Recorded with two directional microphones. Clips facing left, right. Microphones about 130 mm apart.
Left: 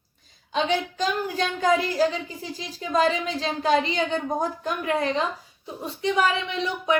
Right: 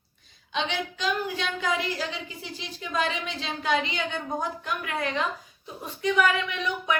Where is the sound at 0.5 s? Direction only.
40° left (ahead or behind).